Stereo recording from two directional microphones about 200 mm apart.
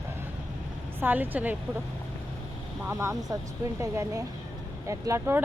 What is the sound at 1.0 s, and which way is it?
Speech, 10° right (ahead or behind).